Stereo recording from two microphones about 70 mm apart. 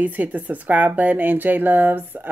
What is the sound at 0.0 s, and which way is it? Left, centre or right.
Speech, right.